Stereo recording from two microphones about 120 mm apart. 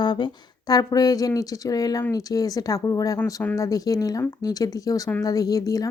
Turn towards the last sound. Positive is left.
turn(degrees=30)  # may be behind; listen again after turning